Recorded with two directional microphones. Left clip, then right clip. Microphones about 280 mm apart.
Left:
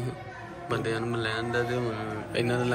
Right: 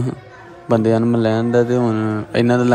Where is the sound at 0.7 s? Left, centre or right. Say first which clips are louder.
Right 14 dB; right.